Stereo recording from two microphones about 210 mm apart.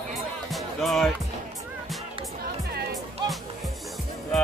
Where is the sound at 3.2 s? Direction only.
20° right (ahead or behind).